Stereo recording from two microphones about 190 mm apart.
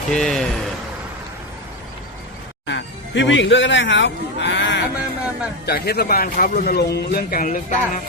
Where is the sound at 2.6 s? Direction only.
70° left (ahead or behind).